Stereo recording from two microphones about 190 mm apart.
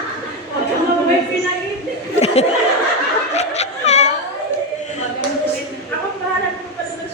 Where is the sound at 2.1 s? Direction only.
35° left (ahead or behind).